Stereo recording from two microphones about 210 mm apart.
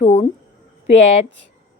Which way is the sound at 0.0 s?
30° left (ahead or behind).